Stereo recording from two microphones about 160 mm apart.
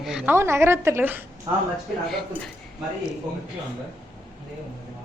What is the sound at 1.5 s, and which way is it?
Speech, 25° right (ahead or behind).